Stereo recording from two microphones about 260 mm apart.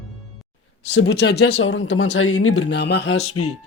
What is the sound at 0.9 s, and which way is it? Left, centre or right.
Speech, left.